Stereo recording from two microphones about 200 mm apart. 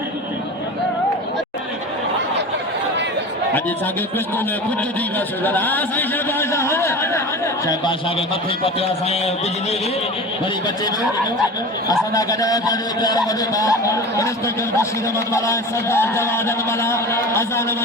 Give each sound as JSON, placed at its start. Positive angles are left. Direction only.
{"t": 5.4, "sound": "a man's voice", "side_deg": 10}
{"t": 8.6, "sound": "a man's voice", "side_deg": 30}
{"t": 11.9, "sound": "a man's voice", "side_deg": 20}